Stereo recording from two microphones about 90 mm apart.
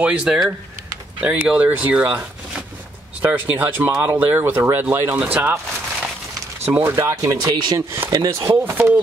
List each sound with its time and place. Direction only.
0.0 s speech: 15° right (ahead or behind)
6.6 s speech: 25° right (ahead or behind)
7.3 s speech: 55° right (ahead or behind)
7.7 s speech: 30° right (ahead or behind)
8.1 s speech: 45° right (ahead or behind)
8.4 s speech: 25° right (ahead or behind)